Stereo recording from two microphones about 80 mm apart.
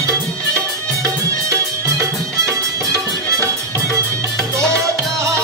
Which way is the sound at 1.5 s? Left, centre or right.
Right.